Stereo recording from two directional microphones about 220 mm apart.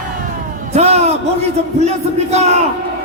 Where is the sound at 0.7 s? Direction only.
30° right (ahead or behind).